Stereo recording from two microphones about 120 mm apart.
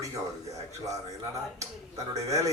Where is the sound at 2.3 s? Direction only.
25° right (ahead or behind).